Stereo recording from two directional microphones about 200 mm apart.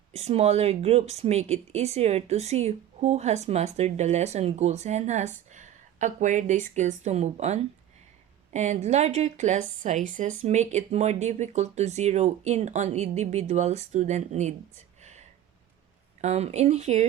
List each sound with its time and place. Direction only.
0.1 s speech: 30° right (ahead or behind)
16.2 s speech: 35° right (ahead or behind)